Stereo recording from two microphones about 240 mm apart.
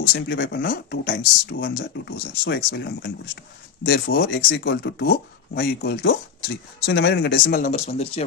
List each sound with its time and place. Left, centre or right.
0.1 s speech: left